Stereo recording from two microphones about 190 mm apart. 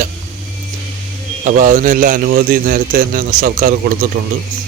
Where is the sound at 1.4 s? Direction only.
45° right (ahead or behind).